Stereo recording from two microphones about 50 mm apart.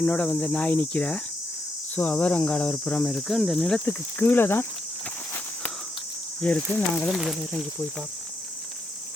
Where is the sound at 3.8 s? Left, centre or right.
Left.